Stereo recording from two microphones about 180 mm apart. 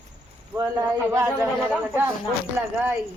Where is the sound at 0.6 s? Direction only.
20° right (ahead or behind).